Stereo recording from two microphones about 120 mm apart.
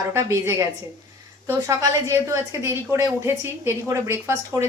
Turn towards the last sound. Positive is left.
turn(degrees=-25)  # may be behind; listen again after turning